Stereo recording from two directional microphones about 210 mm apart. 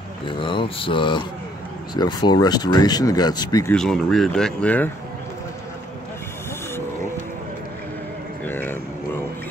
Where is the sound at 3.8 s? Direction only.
5° left (ahead or behind).